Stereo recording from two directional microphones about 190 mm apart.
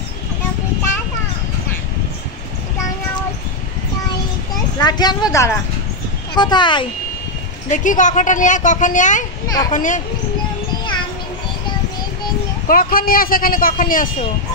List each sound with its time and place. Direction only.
4.7 s a woman's voice: 20° left (ahead or behind)
7.7 s a man's voice: 45° left (ahead or behind)
12.6 s a man's voice: 50° left (ahead or behind)